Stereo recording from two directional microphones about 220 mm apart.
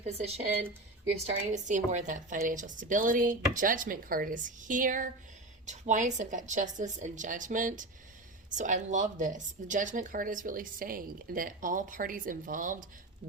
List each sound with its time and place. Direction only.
0.0 s speech: 30° right (ahead or behind)